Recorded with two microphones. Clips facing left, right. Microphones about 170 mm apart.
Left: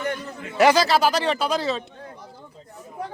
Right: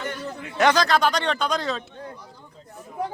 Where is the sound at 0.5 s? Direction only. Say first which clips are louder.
Left 2 dB; 5° left (ahead or behind).